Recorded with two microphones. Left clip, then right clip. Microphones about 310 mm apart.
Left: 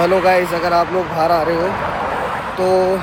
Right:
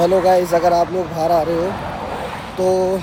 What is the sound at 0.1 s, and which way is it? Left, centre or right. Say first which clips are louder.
Speech: even; centre.